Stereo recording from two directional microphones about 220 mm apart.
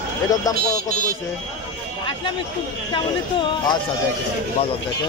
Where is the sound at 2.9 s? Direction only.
20° left (ahead or behind).